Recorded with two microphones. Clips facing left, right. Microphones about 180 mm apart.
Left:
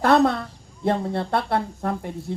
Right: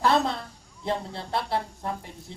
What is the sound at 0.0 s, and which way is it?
A woman's voice, 55° left (ahead or behind).